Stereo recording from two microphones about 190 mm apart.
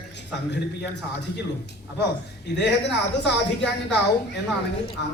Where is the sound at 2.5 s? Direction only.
60° left (ahead or behind).